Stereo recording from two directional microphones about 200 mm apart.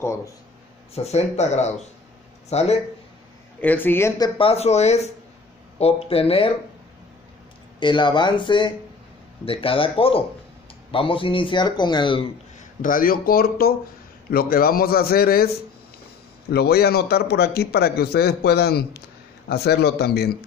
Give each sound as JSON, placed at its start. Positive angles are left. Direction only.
{"t": 0.0, "sound": "speech", "side_deg": 15}
{"t": 0.9, "sound": "speech", "side_deg": 35}
{"t": 3.6, "sound": "speech", "side_deg": 10}
{"t": 4.4, "sound": "a man's voice", "side_deg": 30}
{"t": 7.8, "sound": "a man's voice", "side_deg": 25}
{"t": 12.5, "sound": "a man's voice", "side_deg": 45}